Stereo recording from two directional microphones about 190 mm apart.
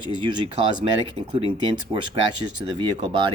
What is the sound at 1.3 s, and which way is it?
Speech, 25° right (ahead or behind).